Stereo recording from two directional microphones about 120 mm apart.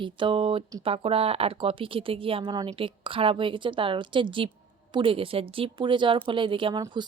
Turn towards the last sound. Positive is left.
turn(degrees=-40)  # may be behind; listen again after turning